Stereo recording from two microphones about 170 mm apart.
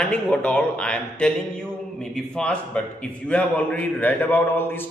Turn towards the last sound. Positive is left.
turn(degrees=15)  # may be behind; listen again after turning